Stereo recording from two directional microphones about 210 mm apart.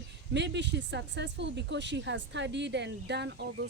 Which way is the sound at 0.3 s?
55° right (ahead or behind).